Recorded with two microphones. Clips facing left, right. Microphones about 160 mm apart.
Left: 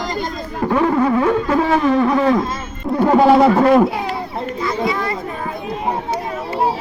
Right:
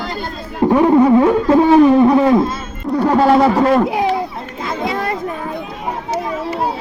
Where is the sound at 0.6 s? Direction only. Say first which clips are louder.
Right 5 dB; 20° right (ahead or behind).